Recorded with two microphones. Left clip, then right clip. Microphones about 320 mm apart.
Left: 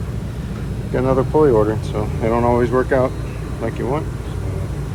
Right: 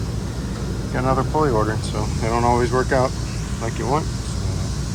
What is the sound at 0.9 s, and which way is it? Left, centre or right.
Speech, centre.